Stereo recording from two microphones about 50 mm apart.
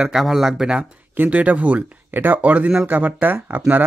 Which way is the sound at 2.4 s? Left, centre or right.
Right.